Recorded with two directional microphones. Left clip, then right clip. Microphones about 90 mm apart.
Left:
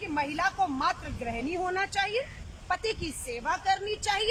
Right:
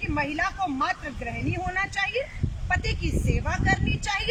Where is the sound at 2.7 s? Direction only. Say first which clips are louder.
Right 2 dB; 25° left (ahead or behind).